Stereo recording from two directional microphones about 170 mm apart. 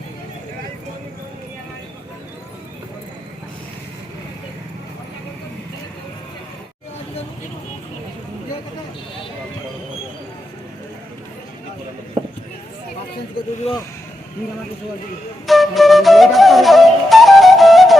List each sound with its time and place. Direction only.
13.7 s speech: 35° left (ahead or behind)
15.4 s flute: centre (ahead or behind)